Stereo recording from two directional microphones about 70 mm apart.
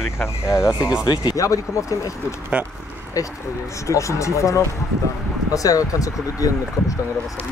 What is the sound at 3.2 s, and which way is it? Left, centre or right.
Speech, left.